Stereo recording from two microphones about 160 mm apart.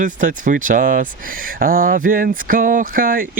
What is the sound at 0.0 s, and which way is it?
Speech, 55° right (ahead or behind).